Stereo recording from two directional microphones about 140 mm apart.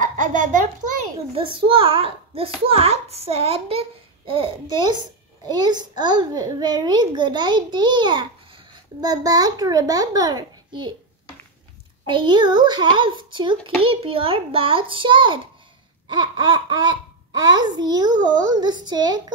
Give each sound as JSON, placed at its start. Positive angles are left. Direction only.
{"t": 0.0, "sound": "a sound", "side_deg": -65}
{"t": 1.3, "sound": "a child's voice", "side_deg": -40}
{"t": 9.1, "sound": "speech", "side_deg": -25}
{"t": 12.1, "sound": "a child's voice", "side_deg": -35}